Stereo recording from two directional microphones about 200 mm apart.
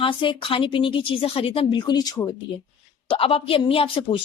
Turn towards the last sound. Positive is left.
turn(degrees=25)  # may be behind; listen again after turning